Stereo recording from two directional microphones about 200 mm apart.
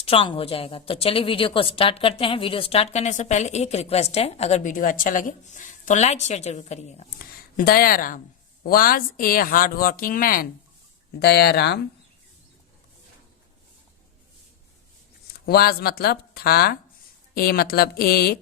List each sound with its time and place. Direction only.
0.0 s a woman's voice: 25° left (ahead or behind); by 11.8 s 55° left (ahead or behind)
15.4 s speech: 50° left (ahead or behind)